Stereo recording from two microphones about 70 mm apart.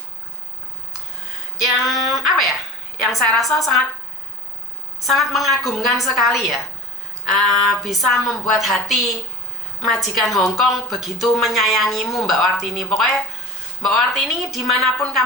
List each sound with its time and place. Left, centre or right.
1.8 s a woman's voice: centre
4.9 s a woman's voice: centre